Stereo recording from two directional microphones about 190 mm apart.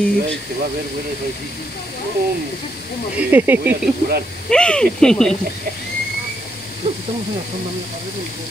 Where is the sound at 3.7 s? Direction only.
55° right (ahead or behind).